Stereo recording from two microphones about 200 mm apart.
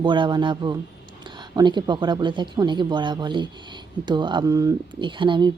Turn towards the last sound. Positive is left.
turn(degrees=-25)  # may be behind; listen again after turning